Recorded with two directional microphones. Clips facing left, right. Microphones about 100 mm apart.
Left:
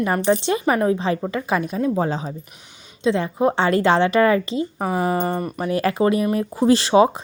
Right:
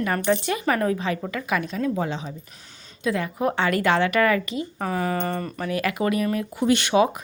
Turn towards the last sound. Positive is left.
turn(degrees=30)  # may be behind; listen again after turning